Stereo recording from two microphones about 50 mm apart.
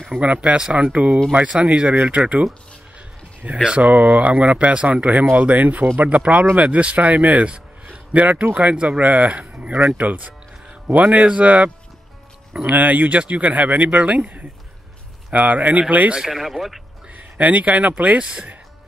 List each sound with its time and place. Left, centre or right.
0.2 s speech: right
3.6 s speech: right
12.7 s speech: right
16.2 s speech: centre
17.4 s speech: right